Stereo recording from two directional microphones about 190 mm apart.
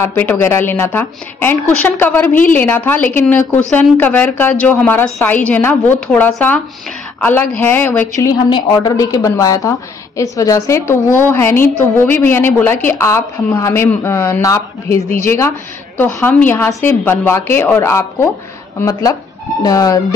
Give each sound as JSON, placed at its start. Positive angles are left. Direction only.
{"t": 0.0, "sound": "a woman's voice", "side_deg": 10}
{"t": 8.5, "sound": "a woman's voice", "side_deg": 20}